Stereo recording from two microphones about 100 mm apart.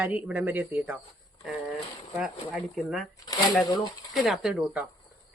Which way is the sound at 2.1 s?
5° right (ahead or behind).